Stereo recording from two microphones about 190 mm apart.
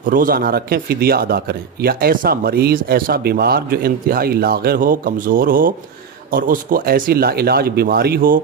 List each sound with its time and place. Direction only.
0.0 s speech: 45° right (ahead or behind)